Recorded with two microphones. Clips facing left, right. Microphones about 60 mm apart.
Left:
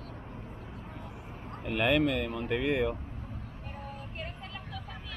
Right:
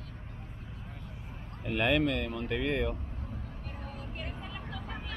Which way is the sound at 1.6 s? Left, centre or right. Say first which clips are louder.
Left 1 dB; centre.